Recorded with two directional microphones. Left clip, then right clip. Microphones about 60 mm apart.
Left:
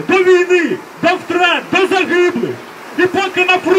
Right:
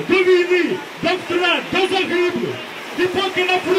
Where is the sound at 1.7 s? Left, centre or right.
Left.